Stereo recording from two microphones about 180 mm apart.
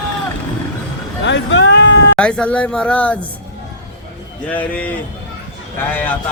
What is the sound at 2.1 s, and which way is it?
Speech, 5° left (ahead or behind).